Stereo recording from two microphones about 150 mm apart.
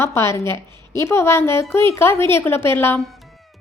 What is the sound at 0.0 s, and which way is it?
A woman's voice, 15° left (ahead or behind).